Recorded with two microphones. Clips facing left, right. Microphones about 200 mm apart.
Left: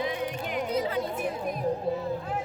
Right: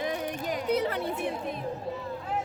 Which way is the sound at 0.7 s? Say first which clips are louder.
Right 1 dB; 65° right (ahead or behind).